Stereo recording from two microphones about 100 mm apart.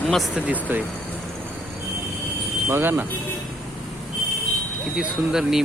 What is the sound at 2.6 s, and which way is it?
Speech, 20° right (ahead or behind).